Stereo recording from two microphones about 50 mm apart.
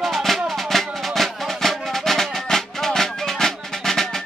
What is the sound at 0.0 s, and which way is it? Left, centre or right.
Music, centre.